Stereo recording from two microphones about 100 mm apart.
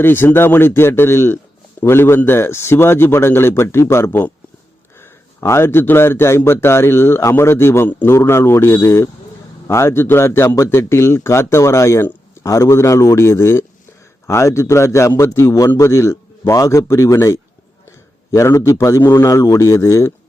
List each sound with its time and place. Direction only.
0.0 s a man's voice: 20° left (ahead or behind)